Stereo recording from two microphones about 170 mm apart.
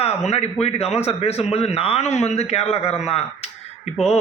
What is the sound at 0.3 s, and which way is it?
A man's voice, 35° left (ahead or behind).